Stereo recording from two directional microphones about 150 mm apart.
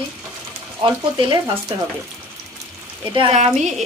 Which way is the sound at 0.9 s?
30° right (ahead or behind).